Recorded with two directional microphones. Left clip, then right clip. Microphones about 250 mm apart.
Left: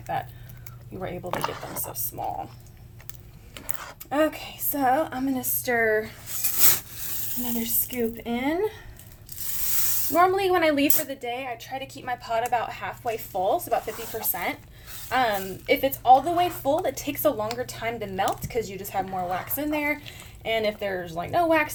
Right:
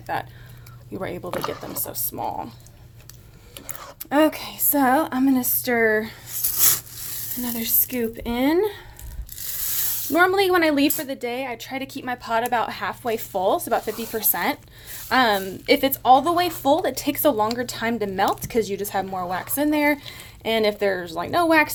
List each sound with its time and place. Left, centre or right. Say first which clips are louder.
0.9 s speech: right 2 dB; right
3.5 s a sound: even; centre
4.1 s a woman's voice: right 5 dB; right
7.6 s speech: right 2 dB; right
10.2 s speech: right 3 dB; right